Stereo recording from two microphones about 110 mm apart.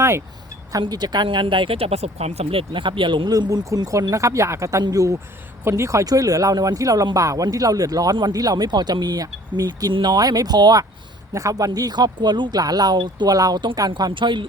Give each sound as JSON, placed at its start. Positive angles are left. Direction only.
{"t": 0.7, "sound": "speech", "side_deg": -40}
{"t": 3.2, "sound": "speech", "side_deg": -35}